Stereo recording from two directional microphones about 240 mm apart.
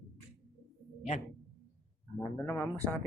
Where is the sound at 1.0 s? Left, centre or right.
Left.